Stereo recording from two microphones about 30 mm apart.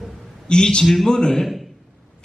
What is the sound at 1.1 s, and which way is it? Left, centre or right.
Speech, centre.